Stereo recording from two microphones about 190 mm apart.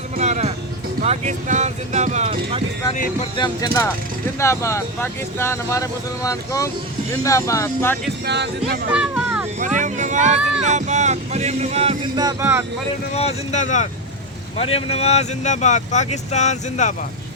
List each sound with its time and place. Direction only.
0.2 s music: 35° right (ahead or behind)
1.0 s speech: 35° right (ahead or behind)
2.9 s speech: 40° left (ahead or behind)
3.3 s speech: 20° left (ahead or behind)
8.2 s speech: 60° right (ahead or behind)
8.9 s a sound: 5° right (ahead or behind)
9.6 s a sound: 40° right (ahead or behind)
10.6 s speech: 35° right (ahead or behind)
12.1 s speech: 15° right (ahead or behind)
13.1 s speech: 35° left (ahead or behind)